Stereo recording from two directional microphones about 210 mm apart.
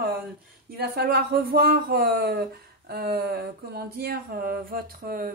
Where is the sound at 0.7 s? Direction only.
50° right (ahead or behind).